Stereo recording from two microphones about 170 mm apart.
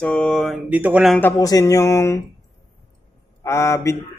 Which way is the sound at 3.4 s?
15° left (ahead or behind).